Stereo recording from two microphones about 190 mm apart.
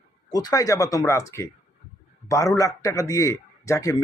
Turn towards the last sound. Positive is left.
turn(degrees=15)  # may be behind; listen again after turning